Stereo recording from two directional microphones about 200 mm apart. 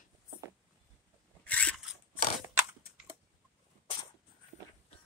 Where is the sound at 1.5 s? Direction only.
5° left (ahead or behind).